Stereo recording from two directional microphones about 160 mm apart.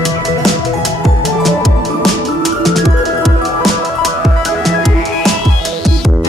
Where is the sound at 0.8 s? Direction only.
Centre (ahead or behind).